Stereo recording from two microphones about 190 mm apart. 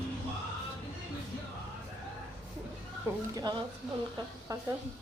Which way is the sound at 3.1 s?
15° right (ahead or behind).